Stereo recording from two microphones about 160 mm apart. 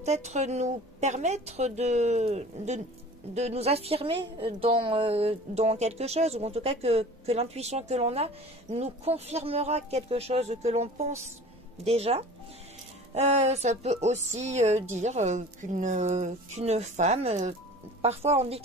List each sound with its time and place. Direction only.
0.0 s a woman's voice: 45° right (ahead or behind)